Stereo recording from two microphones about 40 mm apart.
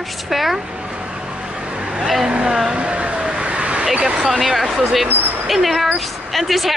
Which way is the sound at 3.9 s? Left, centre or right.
Right.